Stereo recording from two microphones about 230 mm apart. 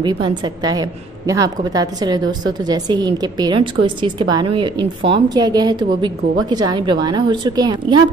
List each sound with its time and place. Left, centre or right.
0.0 s a woman's voice: centre